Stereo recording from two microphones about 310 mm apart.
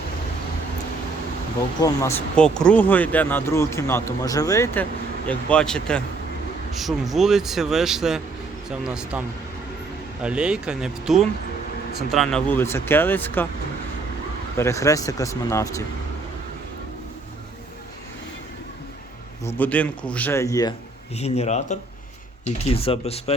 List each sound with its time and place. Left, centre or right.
1.8 s a man's voice: centre
10.2 s a man's voice: centre
14.5 s speech: centre
19.5 s a man's voice: centre